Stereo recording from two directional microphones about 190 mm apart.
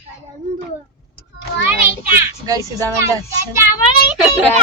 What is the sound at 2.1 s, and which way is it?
Speech, 20° right (ahead or behind).